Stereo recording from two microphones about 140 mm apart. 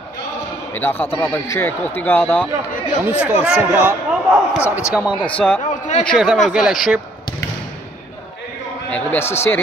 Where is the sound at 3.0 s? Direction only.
10° right (ahead or behind).